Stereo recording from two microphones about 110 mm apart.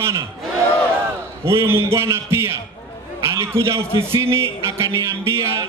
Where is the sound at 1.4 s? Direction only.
25° right (ahead or behind).